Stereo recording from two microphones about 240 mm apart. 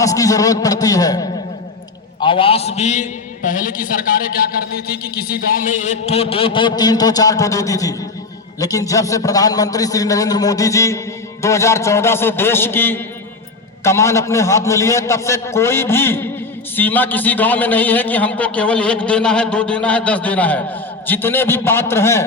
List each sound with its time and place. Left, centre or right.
0.0 s a man's voice: centre